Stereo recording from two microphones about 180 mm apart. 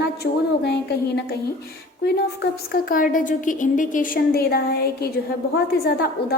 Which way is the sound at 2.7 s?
50° left (ahead or behind).